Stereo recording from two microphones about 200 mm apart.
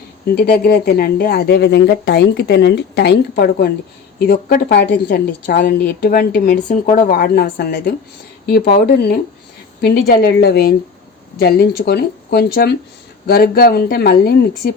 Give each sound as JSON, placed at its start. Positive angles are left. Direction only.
{"t": 0.3, "sound": "a woman's voice", "side_deg": 55}